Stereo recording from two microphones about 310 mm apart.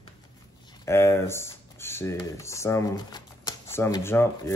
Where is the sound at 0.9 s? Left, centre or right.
Centre.